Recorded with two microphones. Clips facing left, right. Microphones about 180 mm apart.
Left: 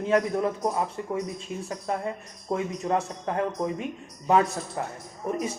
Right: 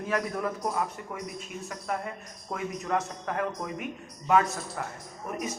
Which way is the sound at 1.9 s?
30° left (ahead or behind).